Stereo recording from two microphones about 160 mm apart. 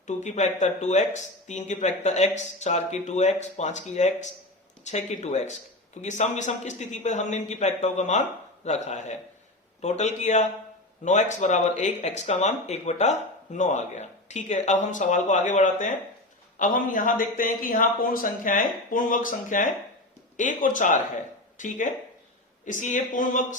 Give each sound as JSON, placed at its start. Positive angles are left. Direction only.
{"t": 0.1, "sound": "speech", "side_deg": 45}